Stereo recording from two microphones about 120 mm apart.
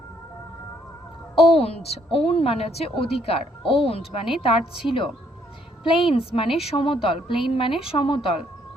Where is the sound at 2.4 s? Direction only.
55° left (ahead or behind).